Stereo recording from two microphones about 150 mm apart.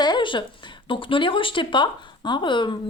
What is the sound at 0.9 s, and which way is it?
Speech, 35° left (ahead or behind).